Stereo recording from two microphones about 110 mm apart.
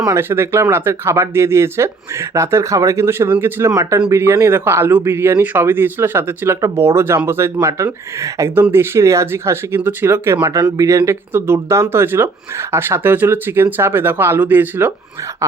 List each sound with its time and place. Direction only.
0.1 s speech: 20° right (ahead or behind)